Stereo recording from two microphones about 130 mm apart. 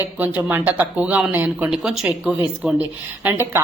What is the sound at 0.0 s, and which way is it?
A woman's voice, 10° right (ahead or behind).